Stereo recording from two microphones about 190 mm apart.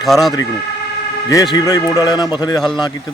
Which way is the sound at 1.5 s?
20° left (ahead or behind).